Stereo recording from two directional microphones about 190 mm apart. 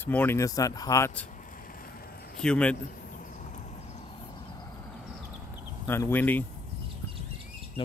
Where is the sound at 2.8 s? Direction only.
45° left (ahead or behind).